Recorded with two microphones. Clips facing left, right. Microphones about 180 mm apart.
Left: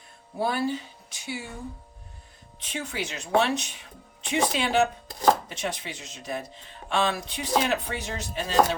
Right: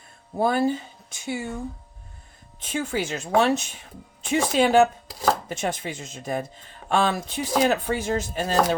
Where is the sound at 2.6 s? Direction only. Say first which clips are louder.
Right 6 dB; 50° right (ahead or behind).